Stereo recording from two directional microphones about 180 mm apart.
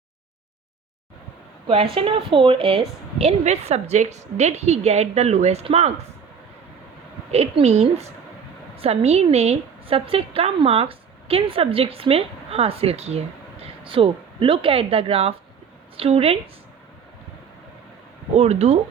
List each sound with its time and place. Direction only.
1.6 s a woman's voice: 30° right (ahead or behind)
7.3 s a woman's voice: 35° right (ahead or behind)
18.3 s a woman's voice: 35° right (ahead or behind)